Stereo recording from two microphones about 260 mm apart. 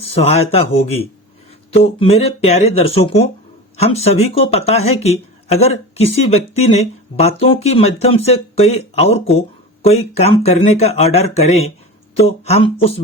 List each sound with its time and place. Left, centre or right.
0.0 s speech: left